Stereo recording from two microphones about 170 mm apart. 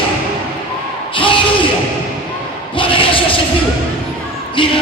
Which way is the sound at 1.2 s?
30° left (ahead or behind).